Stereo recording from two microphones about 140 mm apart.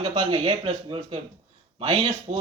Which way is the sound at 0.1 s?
40° right (ahead or behind).